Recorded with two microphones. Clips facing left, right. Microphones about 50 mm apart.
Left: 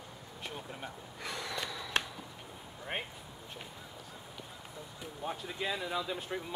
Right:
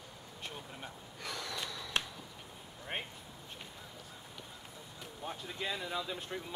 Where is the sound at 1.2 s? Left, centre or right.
Left.